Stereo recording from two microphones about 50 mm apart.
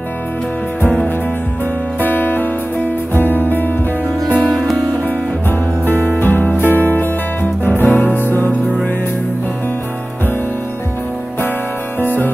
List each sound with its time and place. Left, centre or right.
2.0 s music: left
12.0 s music: left